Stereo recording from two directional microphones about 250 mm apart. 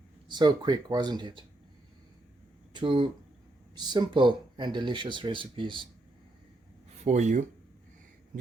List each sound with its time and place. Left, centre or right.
0.3 s speech: centre
2.7 s speech: centre
7.0 s speech: right